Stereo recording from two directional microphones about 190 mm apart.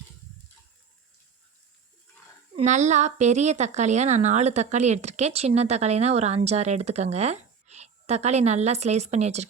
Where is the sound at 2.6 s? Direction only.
40° right (ahead or behind).